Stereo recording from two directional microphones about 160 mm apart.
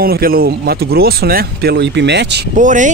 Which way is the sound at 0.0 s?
70° right (ahead or behind).